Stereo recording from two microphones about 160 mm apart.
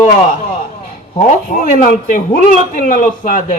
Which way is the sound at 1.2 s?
55° left (ahead or behind).